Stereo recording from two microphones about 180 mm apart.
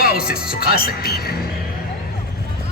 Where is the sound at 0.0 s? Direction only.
55° left (ahead or behind).